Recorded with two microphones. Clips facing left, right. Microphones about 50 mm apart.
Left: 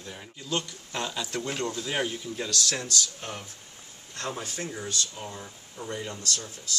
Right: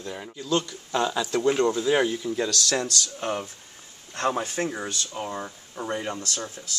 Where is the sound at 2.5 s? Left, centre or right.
Right.